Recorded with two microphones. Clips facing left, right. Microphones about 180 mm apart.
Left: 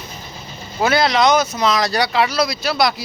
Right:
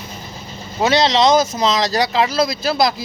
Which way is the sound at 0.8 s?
25° right (ahead or behind).